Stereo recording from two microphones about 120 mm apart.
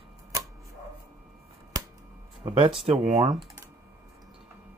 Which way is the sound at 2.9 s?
60° right (ahead or behind).